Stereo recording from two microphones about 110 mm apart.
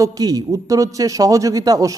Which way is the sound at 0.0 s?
35° right (ahead or behind).